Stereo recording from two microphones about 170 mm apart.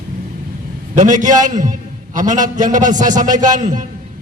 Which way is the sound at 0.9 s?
45° right (ahead or behind).